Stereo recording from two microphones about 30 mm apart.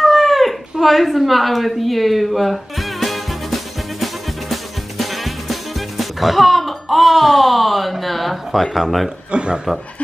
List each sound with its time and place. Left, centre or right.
0.0 s a sound: centre
8.7 s speech: centre
9.3 s speech: right